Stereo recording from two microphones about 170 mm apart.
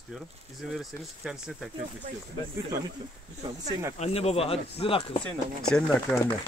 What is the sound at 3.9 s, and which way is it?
Speech, 40° left (ahead or behind).